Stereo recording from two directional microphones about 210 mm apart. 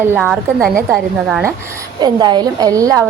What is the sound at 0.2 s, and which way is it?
Speech, centre (ahead or behind).